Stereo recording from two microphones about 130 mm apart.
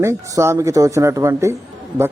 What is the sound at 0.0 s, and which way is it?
A man's voice, 20° right (ahead or behind).